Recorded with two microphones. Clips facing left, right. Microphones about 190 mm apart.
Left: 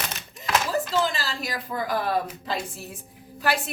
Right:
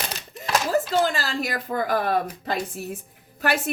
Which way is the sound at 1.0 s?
50° right (ahead or behind).